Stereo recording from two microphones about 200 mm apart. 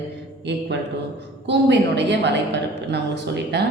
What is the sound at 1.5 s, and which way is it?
A woman's voice, 60° right (ahead or behind).